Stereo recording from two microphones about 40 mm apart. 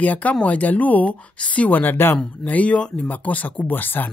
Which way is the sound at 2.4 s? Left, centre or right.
Left.